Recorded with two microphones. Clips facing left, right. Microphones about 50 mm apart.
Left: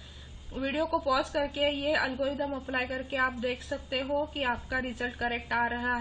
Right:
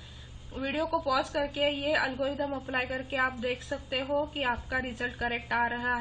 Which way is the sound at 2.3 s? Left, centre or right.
Centre.